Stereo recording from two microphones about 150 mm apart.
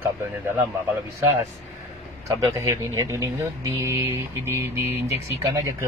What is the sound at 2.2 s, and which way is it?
Speech, 20° right (ahead or behind).